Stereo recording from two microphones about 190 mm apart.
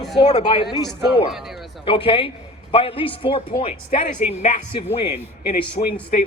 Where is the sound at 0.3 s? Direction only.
35° left (ahead or behind).